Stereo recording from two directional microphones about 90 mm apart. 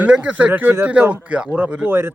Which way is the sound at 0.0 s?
15° right (ahead or behind).